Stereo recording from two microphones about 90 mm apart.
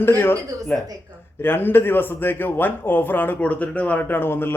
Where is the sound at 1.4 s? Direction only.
25° left (ahead or behind).